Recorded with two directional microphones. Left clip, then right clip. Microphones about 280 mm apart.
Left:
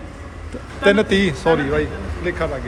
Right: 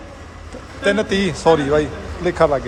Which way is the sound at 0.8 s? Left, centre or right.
Centre.